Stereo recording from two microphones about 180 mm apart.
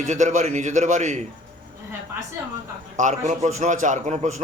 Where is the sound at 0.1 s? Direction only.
40° right (ahead or behind).